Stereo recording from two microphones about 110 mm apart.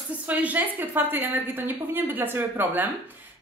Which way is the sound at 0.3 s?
15° right (ahead or behind).